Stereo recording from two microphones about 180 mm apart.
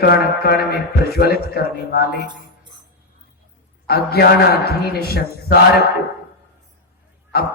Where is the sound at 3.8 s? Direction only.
60° left (ahead or behind).